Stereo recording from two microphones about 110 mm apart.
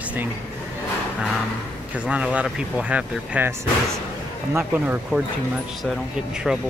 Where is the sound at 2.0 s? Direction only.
10° right (ahead or behind).